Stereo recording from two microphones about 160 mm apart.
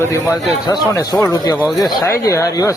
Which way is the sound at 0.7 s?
25° left (ahead or behind).